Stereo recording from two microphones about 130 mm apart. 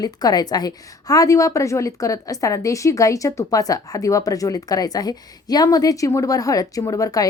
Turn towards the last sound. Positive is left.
turn(degrees=25)  # may be behind; listen again after turning